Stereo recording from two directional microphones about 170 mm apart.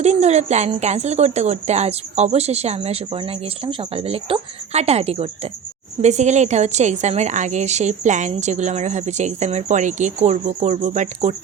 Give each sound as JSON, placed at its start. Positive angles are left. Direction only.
{"t": 0.0, "sound": "a woman's voice", "side_deg": -40}